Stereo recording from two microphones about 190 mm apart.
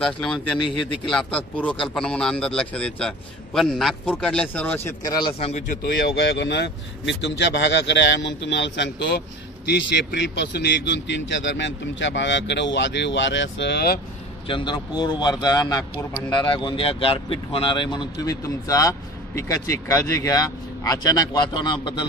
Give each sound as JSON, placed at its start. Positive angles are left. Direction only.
{"t": 0.0, "sound": "a man's voice", "side_deg": 5}
{"t": 5.4, "sound": "a man's voice", "side_deg": 40}
{"t": 5.9, "sound": "a man's voice", "side_deg": 60}
{"t": 14.5, "sound": "speech", "side_deg": 25}